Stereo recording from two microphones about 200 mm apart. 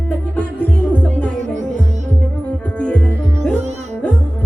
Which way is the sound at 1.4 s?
35° right (ahead or behind).